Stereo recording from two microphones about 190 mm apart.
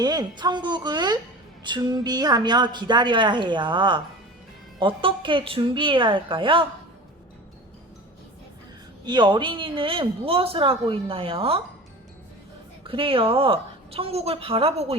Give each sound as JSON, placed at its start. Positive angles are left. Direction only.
{"t": 0.0, "sound": "speech", "side_deg": -20}
{"t": 9.0, "sound": "speech", "side_deg": -25}
{"t": 12.8, "sound": "a woman's voice", "side_deg": -30}